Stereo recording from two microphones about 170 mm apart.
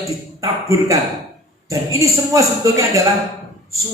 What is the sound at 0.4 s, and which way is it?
A man's voice, 20° right (ahead or behind).